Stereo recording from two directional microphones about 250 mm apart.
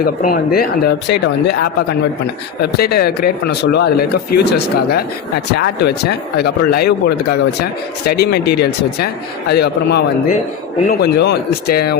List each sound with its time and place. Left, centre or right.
0.0 s speech: left
9.5 s speech: left